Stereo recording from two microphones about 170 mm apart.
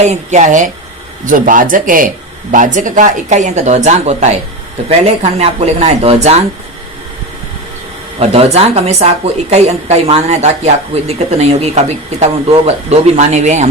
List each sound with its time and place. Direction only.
0.0 s a woman's voice: 45° right (ahead or behind)
8.2 s a woman's voice: 40° right (ahead or behind)